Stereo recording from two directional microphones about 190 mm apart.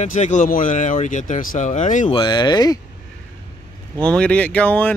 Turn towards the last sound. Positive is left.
turn(degrees=10)  # may be behind; listen again after turning